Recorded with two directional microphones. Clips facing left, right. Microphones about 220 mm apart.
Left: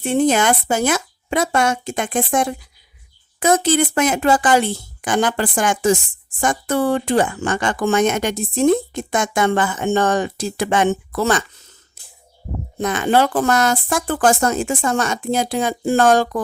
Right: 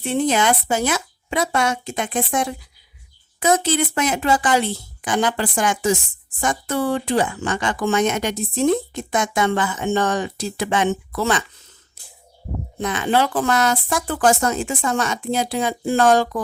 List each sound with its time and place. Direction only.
0.0 s speech: 50° left (ahead or behind)
12.8 s speech: 45° left (ahead or behind)